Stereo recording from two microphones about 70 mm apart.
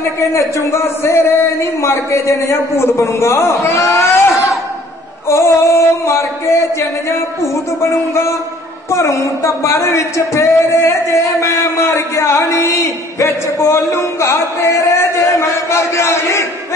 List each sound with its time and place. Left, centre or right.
0.2 s a man's voice: left
5.3 s a man's voice: left
7.8 s a man's voice: left